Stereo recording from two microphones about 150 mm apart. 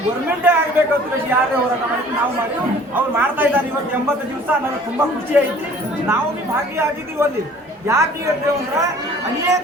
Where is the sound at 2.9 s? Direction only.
15° right (ahead or behind).